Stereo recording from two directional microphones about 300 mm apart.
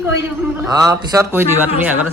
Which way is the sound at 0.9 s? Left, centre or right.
Centre.